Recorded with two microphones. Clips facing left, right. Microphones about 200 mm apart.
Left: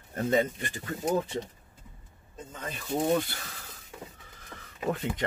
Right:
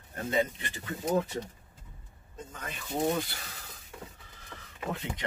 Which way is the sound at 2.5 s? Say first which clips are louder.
Left 4 dB; 25° left (ahead or behind).